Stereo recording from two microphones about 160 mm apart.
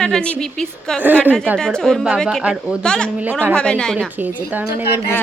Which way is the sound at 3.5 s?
5° left (ahead or behind).